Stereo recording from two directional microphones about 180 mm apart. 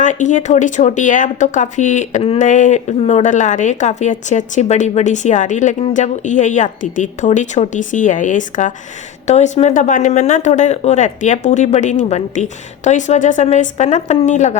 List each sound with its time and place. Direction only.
0.0 s a woman's voice: 40° left (ahead or behind)